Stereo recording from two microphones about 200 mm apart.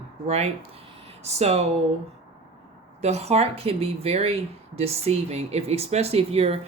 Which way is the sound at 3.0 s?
30° right (ahead or behind).